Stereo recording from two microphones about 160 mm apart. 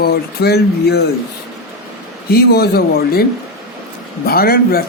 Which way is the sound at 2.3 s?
80° left.